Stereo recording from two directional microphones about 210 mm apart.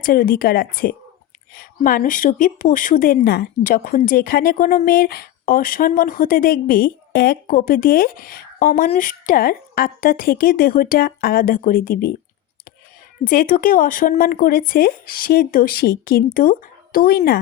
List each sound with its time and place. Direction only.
0.0 s a woman's voice: 45° left (ahead or behind)
13.2 s a woman's voice: 40° left (ahead or behind)